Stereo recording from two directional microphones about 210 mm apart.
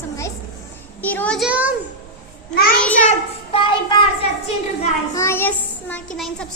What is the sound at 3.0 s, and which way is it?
A child's voice, 30° left (ahead or behind).